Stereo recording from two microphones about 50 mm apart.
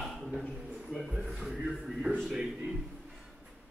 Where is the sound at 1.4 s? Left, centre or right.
Centre.